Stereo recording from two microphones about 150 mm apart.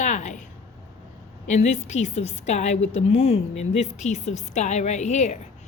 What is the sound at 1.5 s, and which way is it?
A woman's voice, 50° left (ahead or behind).